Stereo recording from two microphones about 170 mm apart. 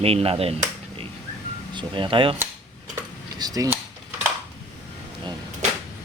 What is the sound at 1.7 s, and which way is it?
Speech, 30° right (ahead or behind).